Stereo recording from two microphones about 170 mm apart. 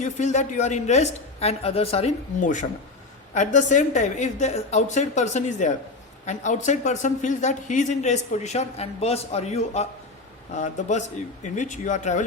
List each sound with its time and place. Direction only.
0.0 s speech: 45° left (ahead or behind)
2.4 s speech: 45° left (ahead or behind)